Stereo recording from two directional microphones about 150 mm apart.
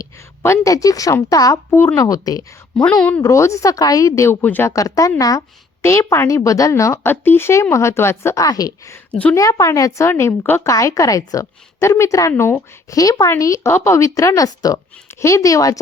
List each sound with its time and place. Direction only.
0.0 s a woman's voice: 20° left (ahead or behind)
2.7 s a woman's voice: 5° left (ahead or behind)
3.2 s a woman's voice: 20° left (ahead or behind)